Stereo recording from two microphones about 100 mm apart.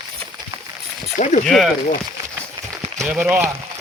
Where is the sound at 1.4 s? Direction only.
Centre (ahead or behind).